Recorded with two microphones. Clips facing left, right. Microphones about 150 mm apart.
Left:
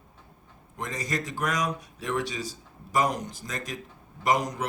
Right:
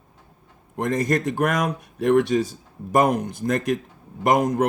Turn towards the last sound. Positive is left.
turn(degrees=-55)  # may be behind; listen again after turning